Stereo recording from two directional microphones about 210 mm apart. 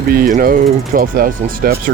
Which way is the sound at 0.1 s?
40° right (ahead or behind).